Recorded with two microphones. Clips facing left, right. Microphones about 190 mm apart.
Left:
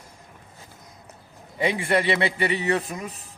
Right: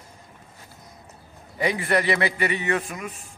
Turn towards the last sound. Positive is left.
turn(degrees=25)  # may be behind; listen again after turning